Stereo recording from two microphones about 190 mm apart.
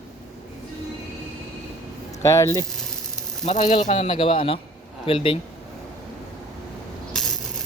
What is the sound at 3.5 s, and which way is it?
Speech, 35° left (ahead or behind).